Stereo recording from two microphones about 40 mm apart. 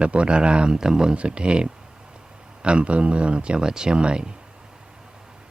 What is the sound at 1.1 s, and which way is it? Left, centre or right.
Speech, right.